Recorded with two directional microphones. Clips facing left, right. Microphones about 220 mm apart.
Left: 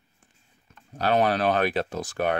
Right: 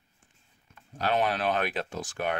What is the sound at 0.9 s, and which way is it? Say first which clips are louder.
Speech: left 5 dB; 40° left (ahead or behind).